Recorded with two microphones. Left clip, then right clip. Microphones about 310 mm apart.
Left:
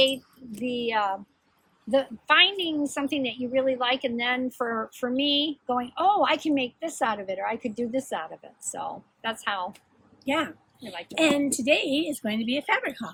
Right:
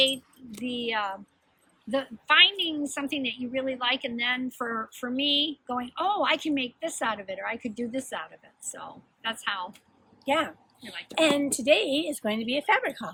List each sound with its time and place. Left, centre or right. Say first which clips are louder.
0.6 s a woman's voice: left 3 dB; centre
10.2 s a woman's voice: right 1 dB; centre